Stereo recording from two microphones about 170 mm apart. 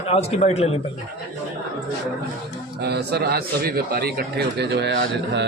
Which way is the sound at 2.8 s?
75° right (ahead or behind).